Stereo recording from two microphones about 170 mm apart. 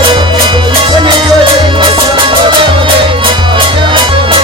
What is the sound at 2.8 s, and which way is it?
Music, 30° right (ahead or behind).